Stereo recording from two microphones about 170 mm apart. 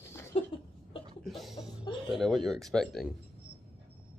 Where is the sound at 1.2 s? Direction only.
Centre (ahead or behind).